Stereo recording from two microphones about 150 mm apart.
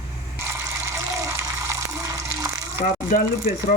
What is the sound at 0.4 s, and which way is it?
Water, 20° right (ahead or behind).